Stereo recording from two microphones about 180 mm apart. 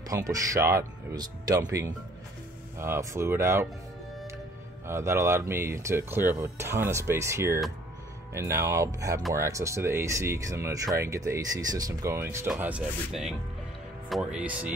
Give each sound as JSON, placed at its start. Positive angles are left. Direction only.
{"t": 0.1, "sound": "speech", "side_deg": -20}
{"t": 4.8, "sound": "speech", "side_deg": -15}